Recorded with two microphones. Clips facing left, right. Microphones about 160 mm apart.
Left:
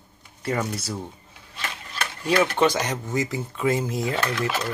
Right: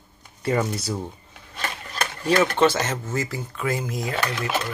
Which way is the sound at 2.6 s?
15° left (ahead or behind).